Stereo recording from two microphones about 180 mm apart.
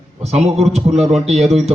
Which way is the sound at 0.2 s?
35° right (ahead or behind).